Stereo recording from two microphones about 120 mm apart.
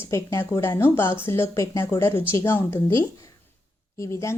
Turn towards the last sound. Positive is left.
turn(degrees=25)  # may be behind; listen again after turning